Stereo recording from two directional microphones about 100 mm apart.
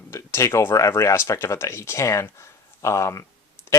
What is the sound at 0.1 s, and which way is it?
Speech, 30° left (ahead or behind).